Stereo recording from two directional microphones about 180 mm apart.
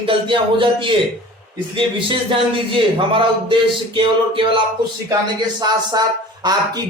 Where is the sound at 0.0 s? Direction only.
30° right (ahead or behind).